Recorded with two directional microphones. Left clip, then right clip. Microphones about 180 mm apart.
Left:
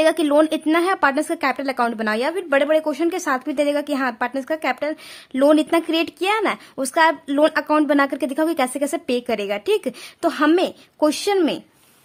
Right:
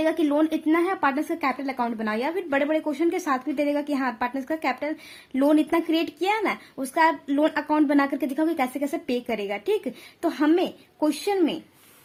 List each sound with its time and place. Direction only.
0.0 s speech: 30° left (ahead or behind)